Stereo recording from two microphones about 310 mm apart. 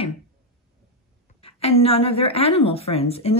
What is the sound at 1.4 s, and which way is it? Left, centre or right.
A woman's voice, centre.